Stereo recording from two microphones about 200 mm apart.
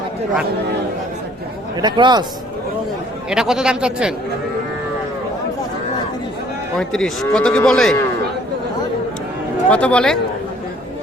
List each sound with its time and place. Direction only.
1.8 s speech: 20° right (ahead or behind)
3.2 s speech: 5° right (ahead or behind)
6.7 s speech: centre (ahead or behind)
9.6 s speech: 5° left (ahead or behind)